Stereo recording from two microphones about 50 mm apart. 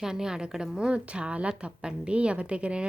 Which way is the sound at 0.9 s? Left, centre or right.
Right.